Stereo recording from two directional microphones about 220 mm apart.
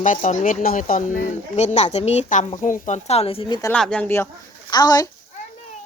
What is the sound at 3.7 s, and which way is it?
Speech, 5° left (ahead or behind).